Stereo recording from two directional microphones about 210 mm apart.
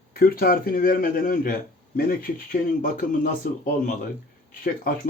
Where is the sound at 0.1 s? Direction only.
45° left (ahead or behind).